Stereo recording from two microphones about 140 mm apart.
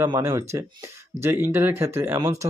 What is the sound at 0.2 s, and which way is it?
Speech, 20° right (ahead or behind).